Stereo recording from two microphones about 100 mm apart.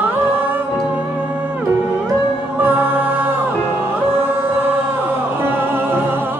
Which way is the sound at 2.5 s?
20° right (ahead or behind).